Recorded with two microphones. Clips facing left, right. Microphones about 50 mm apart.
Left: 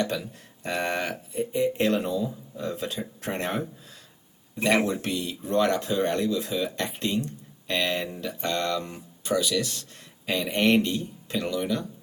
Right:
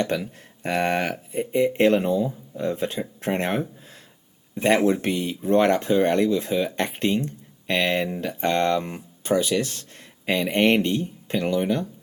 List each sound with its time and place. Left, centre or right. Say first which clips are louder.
0.0 s speech: right 3 dB; right